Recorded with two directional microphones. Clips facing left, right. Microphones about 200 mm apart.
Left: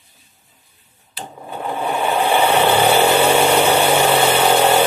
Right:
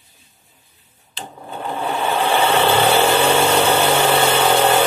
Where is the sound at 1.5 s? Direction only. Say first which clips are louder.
Left 2 dB; 10° left (ahead or behind).